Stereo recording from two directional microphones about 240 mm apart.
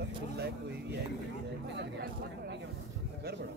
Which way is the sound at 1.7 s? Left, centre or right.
Right.